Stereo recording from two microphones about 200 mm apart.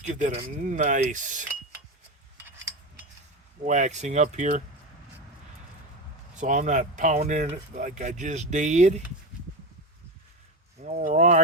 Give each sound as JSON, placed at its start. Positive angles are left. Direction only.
{"t": 0.0, "sound": "speech", "side_deg": -35}
{"t": 3.7, "sound": "speech", "side_deg": -35}
{"t": 6.3, "sound": "speech", "side_deg": -35}
{"t": 10.8, "sound": "speech", "side_deg": -35}